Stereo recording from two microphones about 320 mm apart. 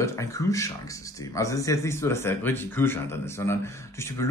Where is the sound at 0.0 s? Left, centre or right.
Centre.